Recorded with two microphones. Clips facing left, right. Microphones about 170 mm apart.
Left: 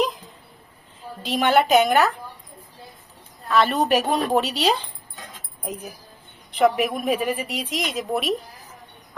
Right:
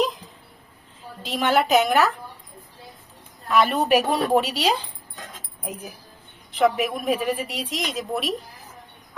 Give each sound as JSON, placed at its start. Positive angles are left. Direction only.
{"t": 1.2, "sound": "a woman's voice", "side_deg": 0}
{"t": 3.5, "sound": "a woman's voice", "side_deg": -10}
{"t": 6.5, "sound": "a woman's voice", "side_deg": 0}